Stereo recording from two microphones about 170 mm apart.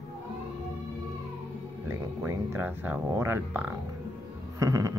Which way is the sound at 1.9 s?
15° right (ahead or behind).